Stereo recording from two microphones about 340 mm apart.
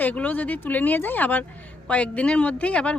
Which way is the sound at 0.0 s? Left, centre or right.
Centre.